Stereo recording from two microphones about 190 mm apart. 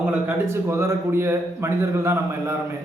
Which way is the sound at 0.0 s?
10° right (ahead or behind).